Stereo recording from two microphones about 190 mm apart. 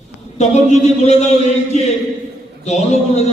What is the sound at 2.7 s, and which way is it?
Speech, 35° left (ahead or behind).